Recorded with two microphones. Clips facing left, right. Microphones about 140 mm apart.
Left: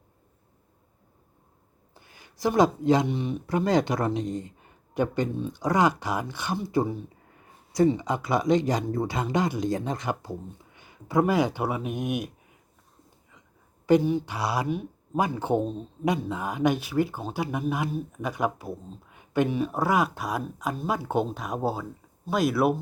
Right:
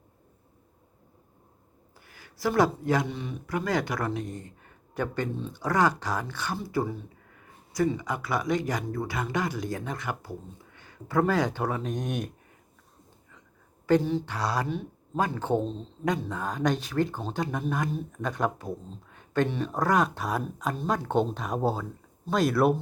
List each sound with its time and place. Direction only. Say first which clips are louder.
2.0 s speech: left 3 dB; 20° left (ahead or behind)
13.8 s speech: left 2 dB; 15° left (ahead or behind)